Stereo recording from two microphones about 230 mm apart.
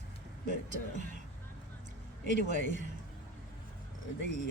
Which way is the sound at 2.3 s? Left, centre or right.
Right.